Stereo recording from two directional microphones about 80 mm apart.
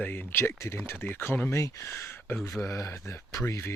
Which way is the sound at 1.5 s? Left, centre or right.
Left.